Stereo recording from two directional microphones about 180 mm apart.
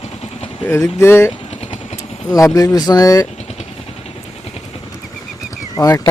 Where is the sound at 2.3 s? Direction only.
20° left (ahead or behind).